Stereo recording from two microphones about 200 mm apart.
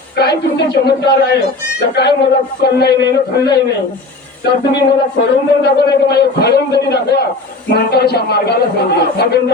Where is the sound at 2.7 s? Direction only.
55° left (ahead or behind).